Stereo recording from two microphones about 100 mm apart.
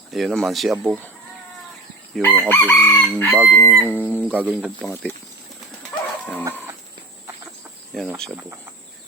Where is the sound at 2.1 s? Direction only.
Centre (ahead or behind).